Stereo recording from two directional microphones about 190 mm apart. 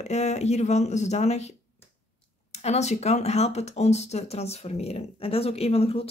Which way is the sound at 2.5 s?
35° left (ahead or behind).